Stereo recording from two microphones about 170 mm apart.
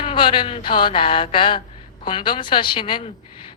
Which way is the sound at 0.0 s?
30° left (ahead or behind).